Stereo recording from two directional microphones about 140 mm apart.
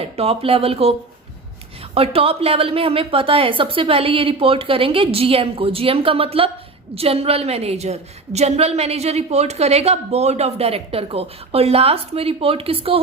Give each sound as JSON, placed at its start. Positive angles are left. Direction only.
{"t": 0.0, "sound": "a woman's voice", "side_deg": -45}
{"t": 2.0, "sound": "a woman's voice", "side_deg": -45}